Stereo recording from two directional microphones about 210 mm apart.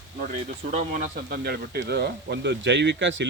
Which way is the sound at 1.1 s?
50° right (ahead or behind).